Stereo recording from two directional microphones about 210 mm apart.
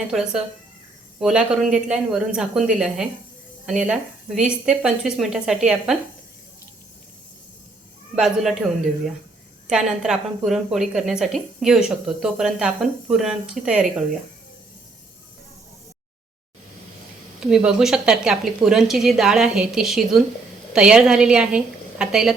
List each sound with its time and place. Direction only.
0.1 s a woman's voice: centre (ahead or behind)
8.1 s speech: centre (ahead or behind)
9.6 s a woman's voice: 5° right (ahead or behind)
17.4 s a woman's voice: 5° right (ahead or behind)